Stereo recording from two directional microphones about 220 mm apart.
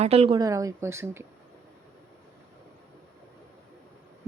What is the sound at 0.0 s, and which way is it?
Speech, 25° right (ahead or behind).